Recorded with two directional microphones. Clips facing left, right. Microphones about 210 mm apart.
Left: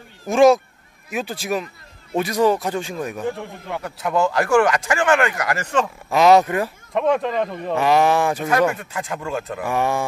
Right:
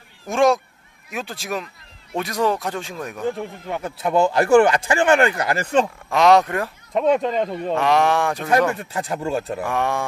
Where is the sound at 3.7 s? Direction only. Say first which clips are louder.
Right 2 dB; 25° right (ahead or behind).